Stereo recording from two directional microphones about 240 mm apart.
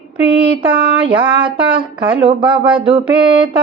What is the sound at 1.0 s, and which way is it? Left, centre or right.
Speech, right.